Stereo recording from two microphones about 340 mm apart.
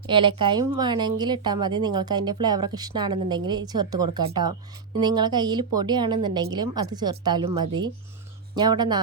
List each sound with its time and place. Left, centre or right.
0.1 s speech: centre
7.4 s speech: right
8.5 s speech: centre